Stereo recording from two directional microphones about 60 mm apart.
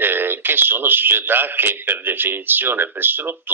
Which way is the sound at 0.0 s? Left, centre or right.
Right.